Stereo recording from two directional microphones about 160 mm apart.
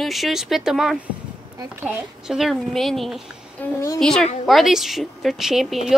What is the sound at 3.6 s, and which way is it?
A child's voice, 10° left (ahead or behind).